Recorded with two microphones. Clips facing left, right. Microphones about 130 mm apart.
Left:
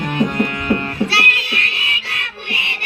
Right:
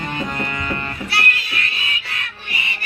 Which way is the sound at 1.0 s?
75° left (ahead or behind).